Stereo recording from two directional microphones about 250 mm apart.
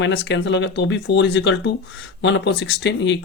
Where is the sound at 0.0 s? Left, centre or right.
Left.